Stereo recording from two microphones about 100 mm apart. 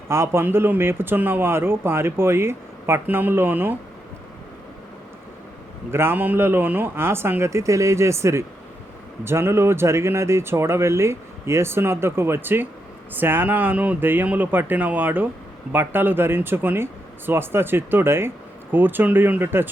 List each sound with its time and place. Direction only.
0.1 s a man's voice: 25° right (ahead or behind)
5.9 s a man's voice: 25° right (ahead or behind)